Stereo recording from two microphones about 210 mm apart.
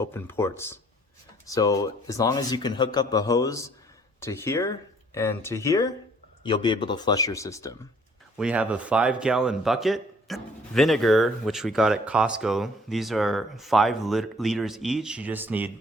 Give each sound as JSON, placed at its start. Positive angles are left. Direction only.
{"t": 0.0, "sound": "speech", "side_deg": 10}
{"t": 8.4, "sound": "a man's voice", "side_deg": -5}